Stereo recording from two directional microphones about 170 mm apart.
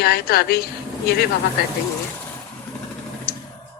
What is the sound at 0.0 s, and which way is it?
Speech, 65° left (ahead or behind).